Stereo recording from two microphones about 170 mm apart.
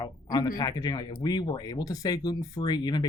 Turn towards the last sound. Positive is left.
turn(degrees=25)  # may be behind; listen again after turning